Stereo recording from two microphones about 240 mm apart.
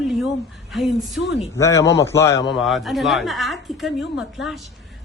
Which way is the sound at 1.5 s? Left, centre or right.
Centre.